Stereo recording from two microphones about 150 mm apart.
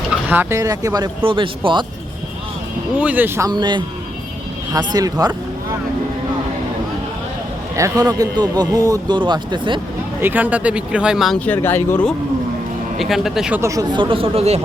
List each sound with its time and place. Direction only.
0.3 s a man's voice: 15° right (ahead or behind); by 1.8 s 35° right (ahead or behind)
3.0 s speech: 10° right (ahead or behind)
3.5 s a man's voice: 30° right (ahead or behind)
7.8 s a man's voice: 25° right (ahead or behind)
10.2 s speech: 15° right (ahead or behind)
11.3 s speech: 10° left (ahead or behind)
13.0 s speech: centre (ahead or behind)
13.6 s speech: 20° right (ahead or behind); by 14.6 s 40° right (ahead or behind)